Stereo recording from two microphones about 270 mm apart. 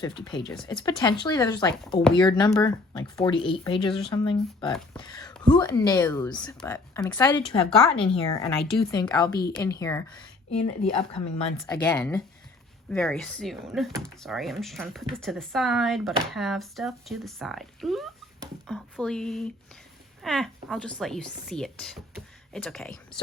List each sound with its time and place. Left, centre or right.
0.0 s speech: centre
7.6 s speech: centre
8.1 s speech: centre